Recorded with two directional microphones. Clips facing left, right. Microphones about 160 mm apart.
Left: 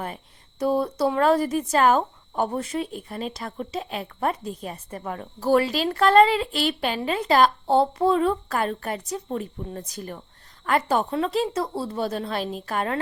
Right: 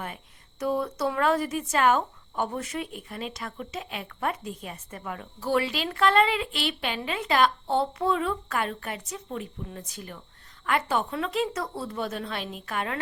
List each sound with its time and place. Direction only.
0.6 s speech: 35° left (ahead or behind)